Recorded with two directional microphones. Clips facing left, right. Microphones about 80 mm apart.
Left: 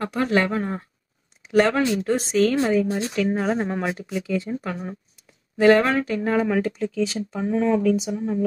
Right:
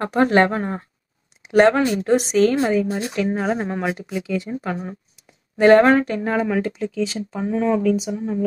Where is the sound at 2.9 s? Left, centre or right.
Right.